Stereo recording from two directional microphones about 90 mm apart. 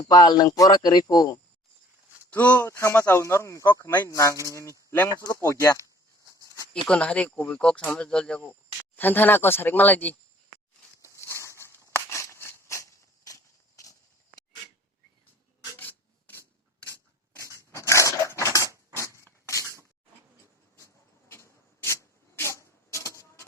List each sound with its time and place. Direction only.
0.0 s a man's voice: 50° left (ahead or behind)
2.3 s speech: 15° left (ahead or behind)
2.6 s speech: 35° left (ahead or behind)
4.1 s speech: 35° left (ahead or behind)
6.8 s speech: 10° left (ahead or behind)
9.0 s speech: 20° left (ahead or behind)
11.0 s a sound: 30° left (ahead or behind)
17.7 s dog: 35° left (ahead or behind)
18.9 s a sound: 30° left (ahead or behind)
21.2 s clock: 30° left (ahead or behind)
22.4 s printer: 30° left (ahead or behind)